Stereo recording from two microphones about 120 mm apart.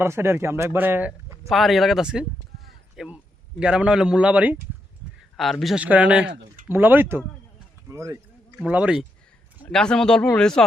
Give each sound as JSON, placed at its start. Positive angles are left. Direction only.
{"t": 0.0, "sound": "speech", "side_deg": -20}
{"t": 1.5, "sound": "speech", "side_deg": 0}
{"t": 2.6, "sound": "a sound", "side_deg": -5}
{"t": 3.6, "sound": "speech", "side_deg": -10}
{"t": 5.4, "sound": "speech", "side_deg": 0}
{"t": 5.8, "sound": "speech", "side_deg": -10}
{"t": 8.5, "sound": "speech", "side_deg": -10}
{"t": 9.6, "sound": "speech", "side_deg": 5}